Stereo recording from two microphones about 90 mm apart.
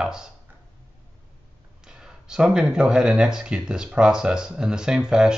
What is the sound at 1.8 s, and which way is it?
Speech, 5° right (ahead or behind).